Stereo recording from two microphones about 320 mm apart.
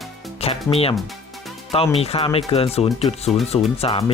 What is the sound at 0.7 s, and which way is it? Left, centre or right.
Speech, centre.